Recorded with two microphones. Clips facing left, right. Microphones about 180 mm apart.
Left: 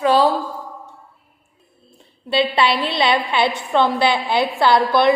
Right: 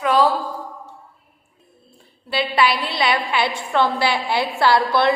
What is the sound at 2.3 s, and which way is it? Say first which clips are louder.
A woman's voice: left 2 dB; 25° left (ahead or behind).